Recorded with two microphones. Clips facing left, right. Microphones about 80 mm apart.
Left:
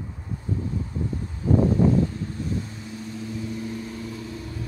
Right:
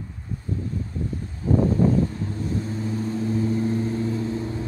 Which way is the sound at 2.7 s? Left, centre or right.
Right.